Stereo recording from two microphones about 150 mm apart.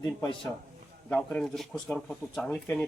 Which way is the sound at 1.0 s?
10° left (ahead or behind).